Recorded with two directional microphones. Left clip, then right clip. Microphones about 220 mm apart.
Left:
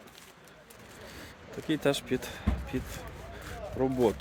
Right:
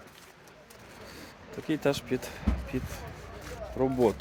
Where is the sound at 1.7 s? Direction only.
5° left (ahead or behind).